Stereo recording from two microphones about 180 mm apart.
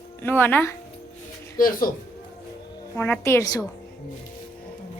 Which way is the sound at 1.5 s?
50° left (ahead or behind).